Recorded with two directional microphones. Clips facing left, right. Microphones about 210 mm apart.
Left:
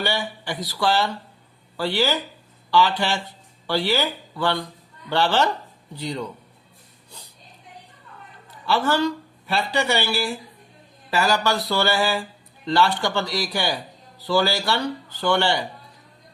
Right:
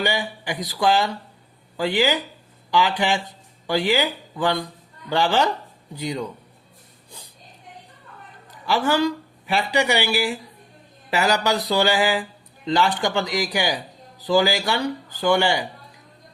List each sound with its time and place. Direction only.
0.0 s speech: 15° right (ahead or behind)
8.6 s speech: 15° right (ahead or behind)